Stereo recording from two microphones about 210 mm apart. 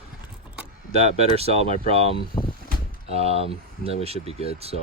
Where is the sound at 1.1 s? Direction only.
30° right (ahead or behind).